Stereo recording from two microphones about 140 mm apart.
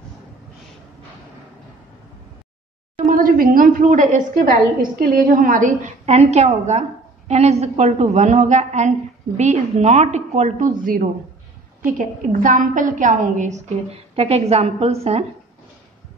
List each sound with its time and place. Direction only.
3.0 s a woman's voice: 85° right; by 4.6 s 65° right (ahead or behind)
5.1 s a woman's voice: 75° right (ahead or behind)
13.8 s a woman's voice: 45° right (ahead or behind)